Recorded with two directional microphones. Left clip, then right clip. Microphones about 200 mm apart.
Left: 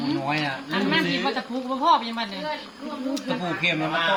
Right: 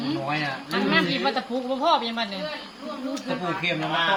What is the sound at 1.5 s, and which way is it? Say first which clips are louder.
Speech: left 4 dB; 25° right (ahead or behind).